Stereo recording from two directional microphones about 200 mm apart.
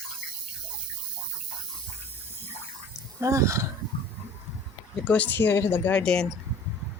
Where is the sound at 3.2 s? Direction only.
15° right (ahead or behind).